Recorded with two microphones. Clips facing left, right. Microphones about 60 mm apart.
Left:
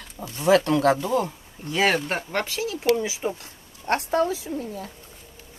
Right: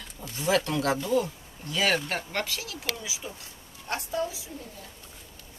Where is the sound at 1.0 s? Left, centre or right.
Left.